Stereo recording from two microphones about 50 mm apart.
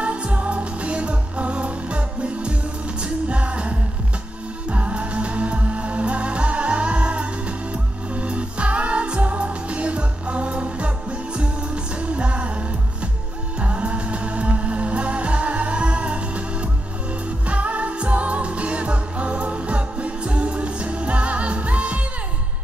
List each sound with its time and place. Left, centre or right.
0.0 s music: right
13.6 s music: right
17.5 s music: right